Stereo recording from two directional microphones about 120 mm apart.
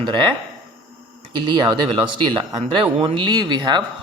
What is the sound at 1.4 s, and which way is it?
Speech, 45° right (ahead or behind).